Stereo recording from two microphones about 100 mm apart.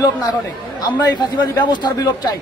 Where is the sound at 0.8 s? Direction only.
45° left (ahead or behind).